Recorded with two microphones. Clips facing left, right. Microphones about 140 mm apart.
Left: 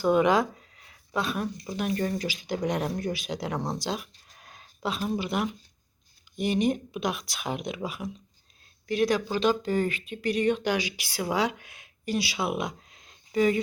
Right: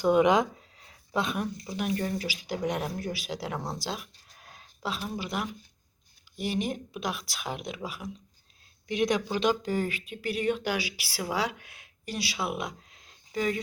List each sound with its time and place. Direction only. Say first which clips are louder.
0.0 s speech: even; 15° right (ahead or behind)
0.8 s a sound: even; 30° right (ahead or behind)
1.2 s speech: left 1 dB; 20° right (ahead or behind)
1.7 s speech: left 2 dB; 5° right (ahead or behind)
4.4 s a sound: left 3 dB; centre (ahead or behind)
5.1 s speech: left 5 dB; centre (ahead or behind)
8.9 s speech: left 2 dB; 20° right (ahead or behind); by 13.6 s centre (ahead or behind)